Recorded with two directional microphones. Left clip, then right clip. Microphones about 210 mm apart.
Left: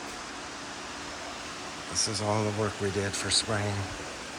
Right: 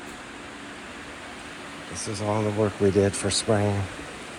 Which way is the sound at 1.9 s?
Centre (ahead or behind).